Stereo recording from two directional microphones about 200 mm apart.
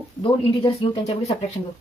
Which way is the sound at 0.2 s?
25° left (ahead or behind).